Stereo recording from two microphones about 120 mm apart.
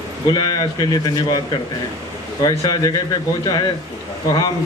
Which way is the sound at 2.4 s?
30° left (ahead or behind).